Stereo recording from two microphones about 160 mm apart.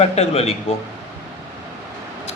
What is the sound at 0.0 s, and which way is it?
Speech, 40° left (ahead or behind).